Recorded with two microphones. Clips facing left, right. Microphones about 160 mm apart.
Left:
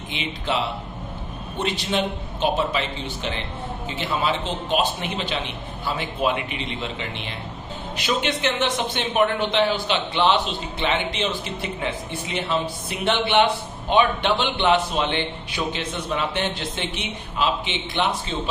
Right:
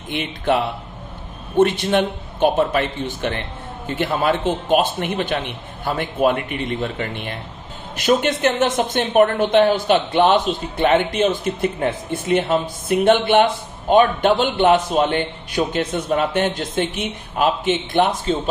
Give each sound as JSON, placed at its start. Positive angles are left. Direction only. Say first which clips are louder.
{"t": 0.1, "sound": "a man's voice", "louder": "right 7 dB", "side_deg": -55}